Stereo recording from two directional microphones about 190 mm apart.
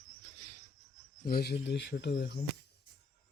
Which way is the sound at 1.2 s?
55° left (ahead or behind).